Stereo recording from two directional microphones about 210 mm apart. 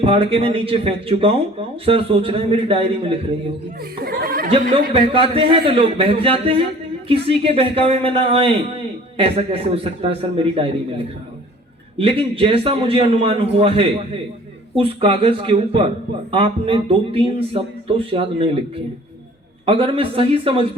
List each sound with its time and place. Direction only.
0.0 s speech: 25° right (ahead or behind)
4.0 s speech: 45° right (ahead or behind)
4.4 s speech: 30° right (ahead or behind)
19.6 s speech: 25° right (ahead or behind)